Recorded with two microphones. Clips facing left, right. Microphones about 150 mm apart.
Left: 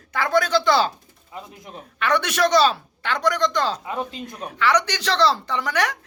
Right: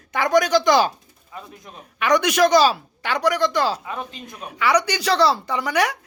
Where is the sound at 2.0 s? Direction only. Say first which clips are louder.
Right 3 dB; 10° right (ahead or behind).